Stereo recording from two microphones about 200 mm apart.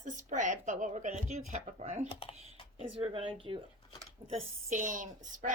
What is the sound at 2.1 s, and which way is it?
Speech, 30° left (ahead or behind).